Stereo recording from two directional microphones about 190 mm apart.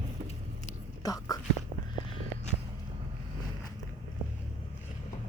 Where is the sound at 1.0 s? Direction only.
20° left (ahead or behind).